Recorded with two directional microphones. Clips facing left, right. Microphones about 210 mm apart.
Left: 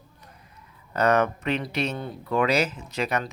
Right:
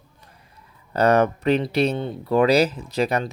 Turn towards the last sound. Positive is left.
turn(degrees=-35)  # may be behind; listen again after turning